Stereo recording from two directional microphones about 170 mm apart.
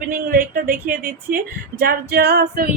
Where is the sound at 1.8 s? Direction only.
65° right (ahead or behind).